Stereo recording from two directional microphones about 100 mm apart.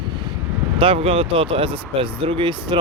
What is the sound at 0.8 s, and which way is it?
Speech, 70° right (ahead or behind).